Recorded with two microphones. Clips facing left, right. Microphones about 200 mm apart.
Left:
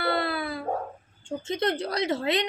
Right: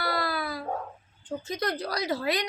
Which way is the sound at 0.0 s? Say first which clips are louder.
Left 3 dB; 25° left (ahead or behind).